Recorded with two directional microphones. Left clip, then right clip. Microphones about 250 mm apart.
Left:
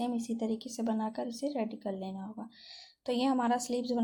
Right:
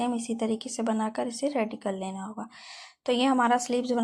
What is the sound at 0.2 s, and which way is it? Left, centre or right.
A woman's voice, centre.